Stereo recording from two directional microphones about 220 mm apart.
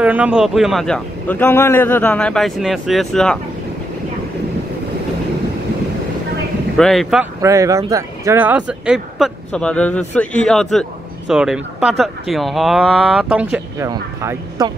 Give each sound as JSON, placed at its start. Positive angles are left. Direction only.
{"t": 0.0, "sound": "speech", "side_deg": -5}
{"t": 6.8, "sound": "speech", "side_deg": 0}
{"t": 7.4, "sound": "speech", "side_deg": -15}
{"t": 13.8, "sound": "speech", "side_deg": -15}